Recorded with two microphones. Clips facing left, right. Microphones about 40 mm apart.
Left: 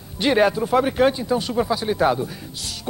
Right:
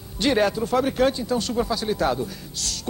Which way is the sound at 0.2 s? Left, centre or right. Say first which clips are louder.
Left 3 dB; centre.